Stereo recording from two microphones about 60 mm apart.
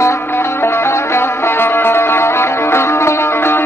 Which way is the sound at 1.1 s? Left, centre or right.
Left.